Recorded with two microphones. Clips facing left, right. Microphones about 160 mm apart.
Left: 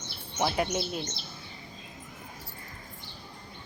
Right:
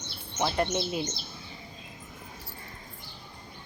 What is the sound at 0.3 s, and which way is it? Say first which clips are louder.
Speech: even; 5° left (ahead or behind).